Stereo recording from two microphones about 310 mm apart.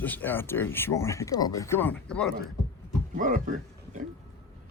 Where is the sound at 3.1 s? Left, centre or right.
Right.